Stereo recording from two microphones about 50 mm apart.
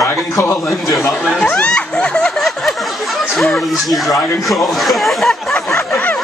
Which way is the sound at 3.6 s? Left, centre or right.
Centre.